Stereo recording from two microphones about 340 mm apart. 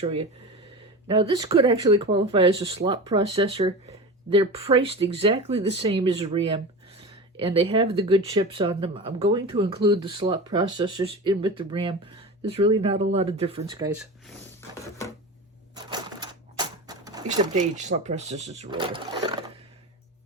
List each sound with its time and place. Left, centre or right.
0.0 s speech: centre
15.7 s typewriter: centre